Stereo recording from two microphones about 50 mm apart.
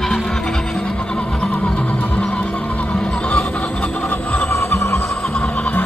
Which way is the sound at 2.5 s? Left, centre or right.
Left.